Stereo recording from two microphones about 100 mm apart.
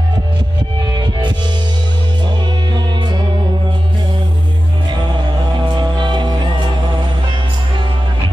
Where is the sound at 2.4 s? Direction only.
50° right (ahead or behind).